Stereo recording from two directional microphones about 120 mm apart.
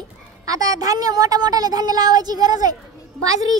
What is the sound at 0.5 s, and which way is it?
Speech, 30° right (ahead or behind).